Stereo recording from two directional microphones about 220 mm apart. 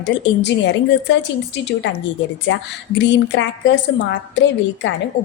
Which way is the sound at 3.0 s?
55° left (ahead or behind).